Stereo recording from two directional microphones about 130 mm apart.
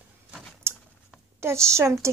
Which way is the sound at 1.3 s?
20° right (ahead or behind).